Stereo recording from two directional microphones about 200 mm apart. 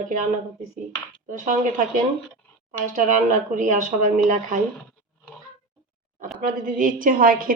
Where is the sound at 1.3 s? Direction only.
40° right (ahead or behind).